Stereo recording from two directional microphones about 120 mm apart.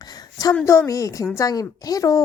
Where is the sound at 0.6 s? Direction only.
25° left (ahead or behind).